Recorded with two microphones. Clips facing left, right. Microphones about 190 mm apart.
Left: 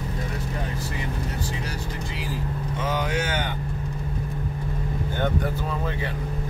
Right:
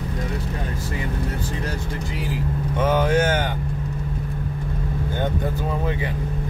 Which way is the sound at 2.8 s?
50° right (ahead or behind).